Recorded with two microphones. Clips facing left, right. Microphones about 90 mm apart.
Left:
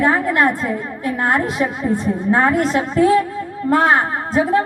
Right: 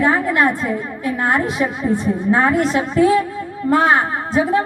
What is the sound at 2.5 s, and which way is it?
A woman's voice, 45° left (ahead or behind).